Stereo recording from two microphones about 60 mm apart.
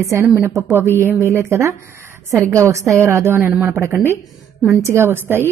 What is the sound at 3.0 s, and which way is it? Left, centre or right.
Speech, right.